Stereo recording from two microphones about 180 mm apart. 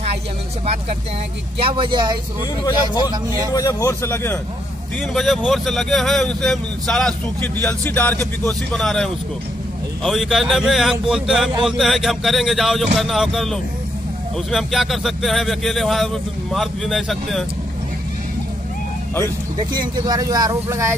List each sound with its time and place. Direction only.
1.6 s speech: 30° right (ahead or behind)
3.5 s speech: 15° left (ahead or behind)
5.1 s speech: centre (ahead or behind)
19.7 s speech: 25° right (ahead or behind)